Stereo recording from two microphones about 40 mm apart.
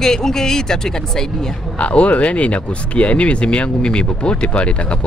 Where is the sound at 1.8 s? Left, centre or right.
Left.